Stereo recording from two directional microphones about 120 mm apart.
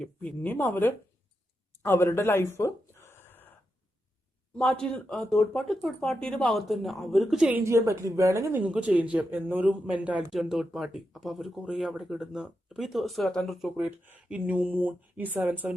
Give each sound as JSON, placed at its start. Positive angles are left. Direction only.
{"t": 0.0, "sound": "speech", "side_deg": 10}
{"t": 1.8, "sound": "gasp", "side_deg": 20}
{"t": 4.5, "sound": "speech", "side_deg": 5}
{"t": 7.6, "sound": "a woman's voice", "side_deg": -25}
{"t": 8.6, "sound": "speech", "side_deg": -10}
{"t": 13.7, "sound": "speech", "side_deg": -15}